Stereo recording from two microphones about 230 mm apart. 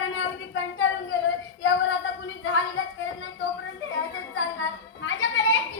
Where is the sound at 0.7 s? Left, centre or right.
Left.